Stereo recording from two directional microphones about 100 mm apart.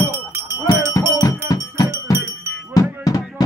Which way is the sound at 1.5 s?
40° left (ahead or behind).